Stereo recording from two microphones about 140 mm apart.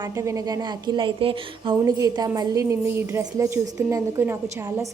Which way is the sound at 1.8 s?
25° right (ahead or behind).